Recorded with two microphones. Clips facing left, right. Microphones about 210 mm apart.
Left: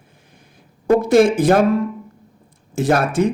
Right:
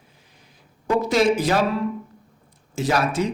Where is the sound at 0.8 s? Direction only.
50° left (ahead or behind).